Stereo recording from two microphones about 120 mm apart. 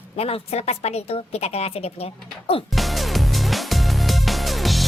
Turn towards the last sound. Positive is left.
turn(degrees=0)  # may be behind; listen again after turning